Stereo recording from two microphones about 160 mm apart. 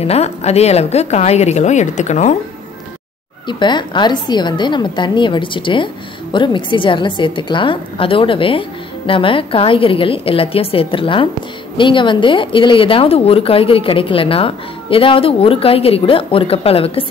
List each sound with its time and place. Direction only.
0.0 s a woman's voice: 40° left (ahead or behind)
3.4 s a woman's voice: 30° left (ahead or behind)